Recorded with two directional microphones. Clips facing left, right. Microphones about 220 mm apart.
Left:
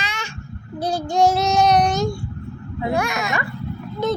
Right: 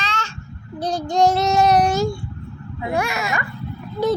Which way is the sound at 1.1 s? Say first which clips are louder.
Right 1 dB; centre (ahead or behind).